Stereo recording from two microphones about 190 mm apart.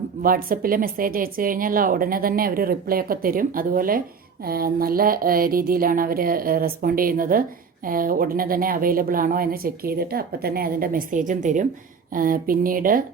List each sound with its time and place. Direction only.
0.2 s a woman's voice: 50° right (ahead or behind)